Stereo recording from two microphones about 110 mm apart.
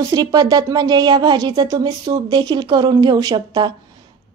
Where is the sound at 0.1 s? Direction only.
35° right (ahead or behind).